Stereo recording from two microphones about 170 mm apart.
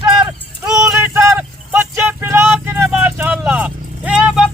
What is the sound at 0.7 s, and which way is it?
Clip-clop, 5° right (ahead or behind).